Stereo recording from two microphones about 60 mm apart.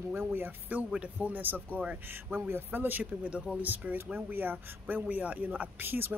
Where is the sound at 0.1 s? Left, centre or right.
Right.